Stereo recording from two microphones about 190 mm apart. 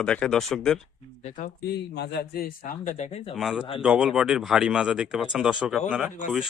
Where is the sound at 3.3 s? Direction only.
Centre (ahead or behind).